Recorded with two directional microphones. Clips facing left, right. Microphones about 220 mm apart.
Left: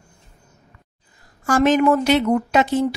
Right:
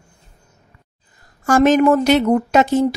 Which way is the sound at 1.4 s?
45° right (ahead or behind).